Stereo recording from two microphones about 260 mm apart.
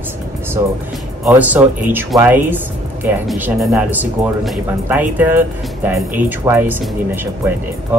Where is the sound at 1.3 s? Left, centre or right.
Centre.